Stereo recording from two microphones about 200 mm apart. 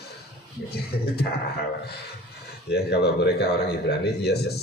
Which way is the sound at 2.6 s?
55° left (ahead or behind).